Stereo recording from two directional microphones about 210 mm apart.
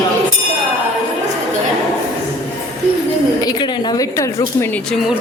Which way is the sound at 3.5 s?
20° left (ahead or behind).